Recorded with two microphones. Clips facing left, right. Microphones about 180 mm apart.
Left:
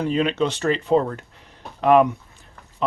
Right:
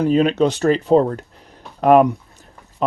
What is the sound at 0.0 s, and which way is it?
Speech, 40° right (ahead or behind).